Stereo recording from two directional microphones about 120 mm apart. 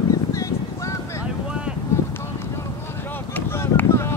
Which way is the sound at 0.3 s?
25° left (ahead or behind).